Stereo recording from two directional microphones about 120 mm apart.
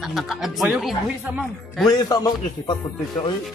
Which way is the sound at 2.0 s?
35° left (ahead or behind).